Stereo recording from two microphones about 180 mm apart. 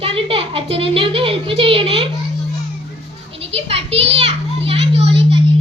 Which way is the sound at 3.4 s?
35° right (ahead or behind).